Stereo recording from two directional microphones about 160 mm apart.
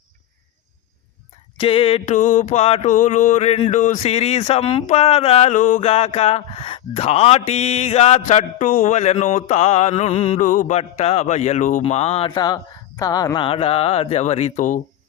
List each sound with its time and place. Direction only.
1.5 s mantra: 35° left (ahead or behind); by 5.8 s 50° left (ahead or behind)
5.8 s mantra: 40° left (ahead or behind)
12.3 s speech: 25° left (ahead or behind)
13.0 s mantra: 20° left (ahead or behind); by 14.8 s 50° left (ahead or behind)